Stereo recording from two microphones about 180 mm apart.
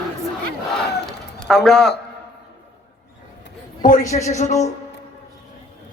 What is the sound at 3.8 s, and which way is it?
Speech, 45° left (ahead or behind).